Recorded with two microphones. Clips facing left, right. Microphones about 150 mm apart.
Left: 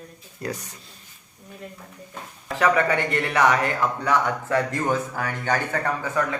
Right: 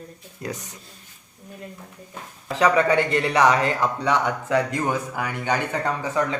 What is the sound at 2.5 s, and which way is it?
A man's voice, 20° right (ahead or behind).